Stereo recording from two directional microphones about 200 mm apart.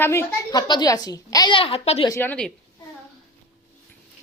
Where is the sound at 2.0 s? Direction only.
10° left (ahead or behind).